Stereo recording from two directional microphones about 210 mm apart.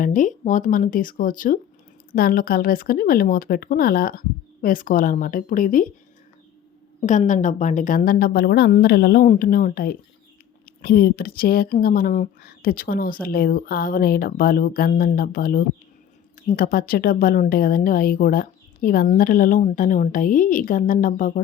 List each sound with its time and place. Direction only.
0.0 s a woman's voice: 40° left (ahead or behind)
7.0 s a woman's voice: 35° left (ahead or behind)